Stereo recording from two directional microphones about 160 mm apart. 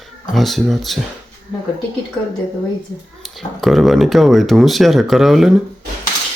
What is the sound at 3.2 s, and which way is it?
A man's voice, centre (ahead or behind).